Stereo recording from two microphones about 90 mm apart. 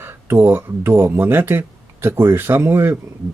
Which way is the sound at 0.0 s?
25° right (ahead or behind).